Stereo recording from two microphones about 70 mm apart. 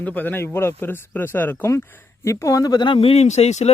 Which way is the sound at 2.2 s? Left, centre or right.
Left.